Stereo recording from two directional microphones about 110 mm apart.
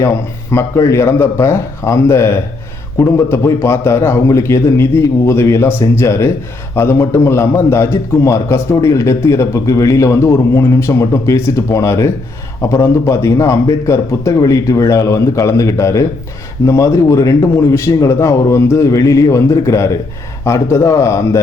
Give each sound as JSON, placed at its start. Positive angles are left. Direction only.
{"t": 0.5, "sound": "a man's voice", "side_deg": 25}